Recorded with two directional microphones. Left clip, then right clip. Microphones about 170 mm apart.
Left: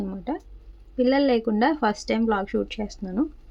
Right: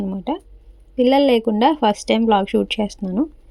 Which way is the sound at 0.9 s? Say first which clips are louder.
Right 6 dB; 25° right (ahead or behind).